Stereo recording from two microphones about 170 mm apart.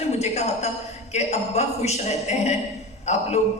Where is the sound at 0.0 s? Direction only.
40° left (ahead or behind).